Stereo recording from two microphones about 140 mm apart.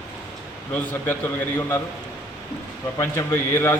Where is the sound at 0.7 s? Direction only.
15° left (ahead or behind).